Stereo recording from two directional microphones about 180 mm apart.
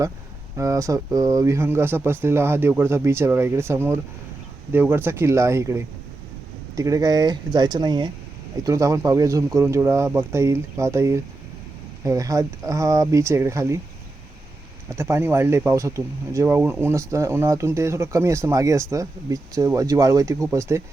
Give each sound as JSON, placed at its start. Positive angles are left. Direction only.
{"t": 0.5, "sound": "speech", "side_deg": -15}
{"t": 14.8, "sound": "speech", "side_deg": -15}